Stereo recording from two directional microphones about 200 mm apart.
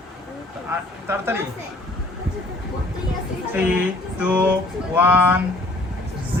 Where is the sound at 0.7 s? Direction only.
10° right (ahead or behind).